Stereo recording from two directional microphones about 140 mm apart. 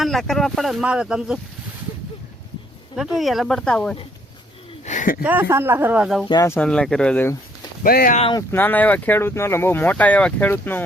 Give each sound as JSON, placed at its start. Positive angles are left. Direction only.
{"t": 0.0, "sound": "speech", "side_deg": 0}
{"t": 2.9, "sound": "speech", "side_deg": 0}
{"t": 4.9, "sound": "a sound", "side_deg": 70}
{"t": 5.2, "sound": "speech", "side_deg": -15}
{"t": 6.2, "sound": "speech", "side_deg": 30}
{"t": 6.5, "sound": "speech", "side_deg": 10}
{"t": 7.9, "sound": "speech", "side_deg": 90}
{"t": 8.5, "sound": "speech", "side_deg": 15}